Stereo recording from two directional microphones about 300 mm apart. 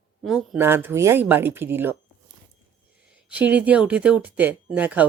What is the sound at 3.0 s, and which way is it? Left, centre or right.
Speech, centre.